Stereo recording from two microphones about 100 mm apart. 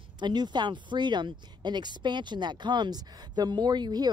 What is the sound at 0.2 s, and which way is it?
Speech, 45° right (ahead or behind).